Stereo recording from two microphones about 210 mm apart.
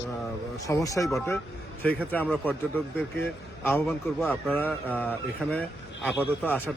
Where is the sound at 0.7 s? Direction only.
15° left (ahead or behind).